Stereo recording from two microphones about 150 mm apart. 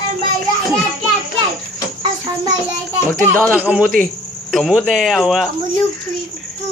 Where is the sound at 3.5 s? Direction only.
10° right (ahead or behind).